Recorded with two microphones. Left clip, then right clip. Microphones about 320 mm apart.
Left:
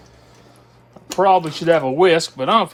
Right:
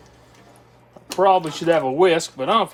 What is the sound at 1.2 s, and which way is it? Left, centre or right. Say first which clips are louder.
Speech: left 2 dB; left.